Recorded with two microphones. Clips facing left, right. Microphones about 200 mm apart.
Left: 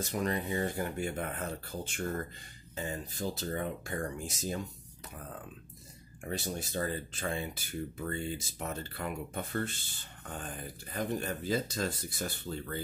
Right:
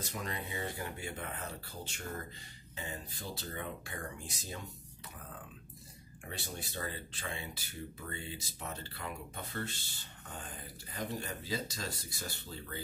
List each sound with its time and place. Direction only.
0.0 s speech: 45° left (ahead or behind)
6.2 s speech: 45° left (ahead or behind)
10.9 s speech: 55° left (ahead or behind)